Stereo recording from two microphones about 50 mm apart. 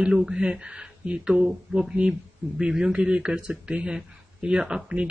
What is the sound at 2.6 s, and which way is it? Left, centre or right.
A man's voice, centre.